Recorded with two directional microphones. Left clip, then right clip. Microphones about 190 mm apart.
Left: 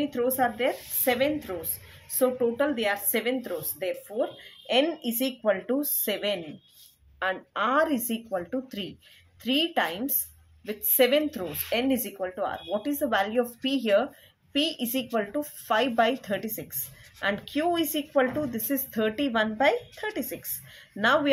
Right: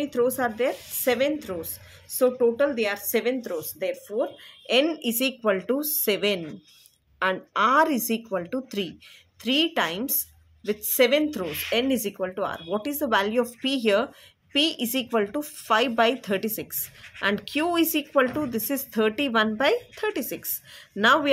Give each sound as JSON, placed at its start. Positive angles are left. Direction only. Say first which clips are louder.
{"t": 0.0, "sound": "speech", "louder": "right 2 dB", "side_deg": -35}
{"t": 4.6, "sound": "speech", "louder": "right 2 dB", "side_deg": -45}